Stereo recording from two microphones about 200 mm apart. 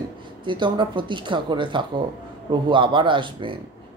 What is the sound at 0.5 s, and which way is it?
Speech, 25° right (ahead or behind).